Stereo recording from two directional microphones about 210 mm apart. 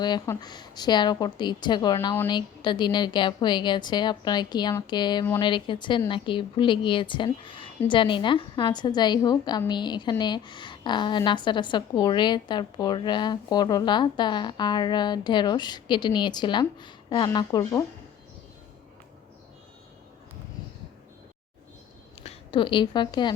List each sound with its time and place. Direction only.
0.0 s a woman's voice: 20° left (ahead or behind)
22.2 s a woman's voice: 25° left (ahead or behind)